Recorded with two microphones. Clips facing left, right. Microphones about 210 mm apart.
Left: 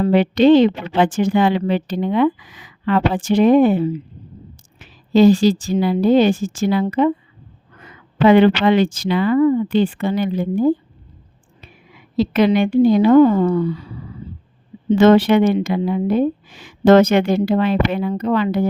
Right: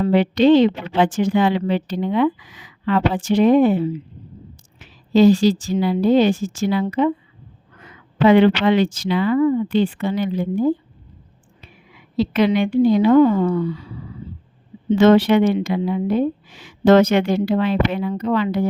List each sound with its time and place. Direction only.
0.0 s speech: 50° left (ahead or behind)
8.2 s a woman's voice: 50° left (ahead or behind)
14.8 s speech: 50° left (ahead or behind)